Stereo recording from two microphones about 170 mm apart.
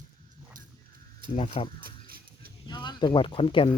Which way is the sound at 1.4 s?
35° left (ahead or behind).